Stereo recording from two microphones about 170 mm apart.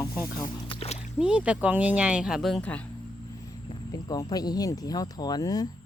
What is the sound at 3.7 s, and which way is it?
Speech, 20° left (ahead or behind).